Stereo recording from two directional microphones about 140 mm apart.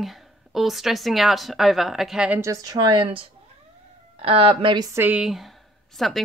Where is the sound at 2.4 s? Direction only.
25° right (ahead or behind).